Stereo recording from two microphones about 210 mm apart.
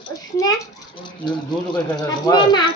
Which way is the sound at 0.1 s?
15° left (ahead or behind).